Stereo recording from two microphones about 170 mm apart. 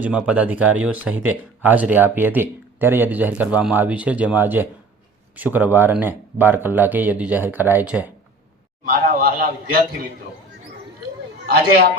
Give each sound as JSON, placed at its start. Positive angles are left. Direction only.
{"t": 0.0, "sound": "speech", "side_deg": -5}
{"t": 8.8, "sound": "a man's voice", "side_deg": -55}
{"t": 11.4, "sound": "a man's voice", "side_deg": -65}